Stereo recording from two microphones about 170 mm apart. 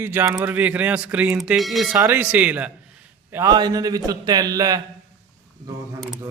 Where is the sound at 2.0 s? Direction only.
10° right (ahead or behind).